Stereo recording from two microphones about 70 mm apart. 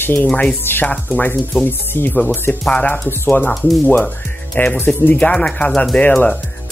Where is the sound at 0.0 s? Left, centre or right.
Left.